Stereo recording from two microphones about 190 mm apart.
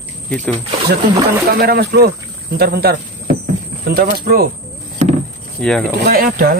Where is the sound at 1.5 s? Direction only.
55° right (ahead or behind).